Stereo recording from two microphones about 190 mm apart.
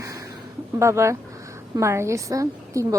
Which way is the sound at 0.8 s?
15° right (ahead or behind).